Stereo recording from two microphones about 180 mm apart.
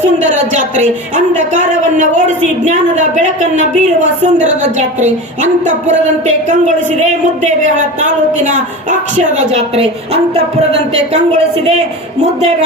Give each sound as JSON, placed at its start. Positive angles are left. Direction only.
{"t": 0.0, "sound": "a woman's voice", "side_deg": -45}
{"t": 7.0, "sound": "speech", "side_deg": -40}